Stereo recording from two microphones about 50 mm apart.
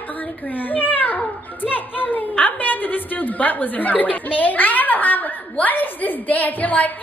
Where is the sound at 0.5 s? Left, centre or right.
Left.